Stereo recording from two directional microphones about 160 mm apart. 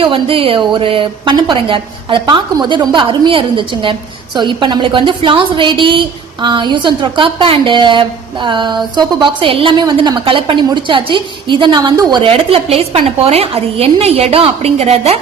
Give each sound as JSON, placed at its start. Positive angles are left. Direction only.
{"t": 0.0, "sound": "a woman's voice", "side_deg": -35}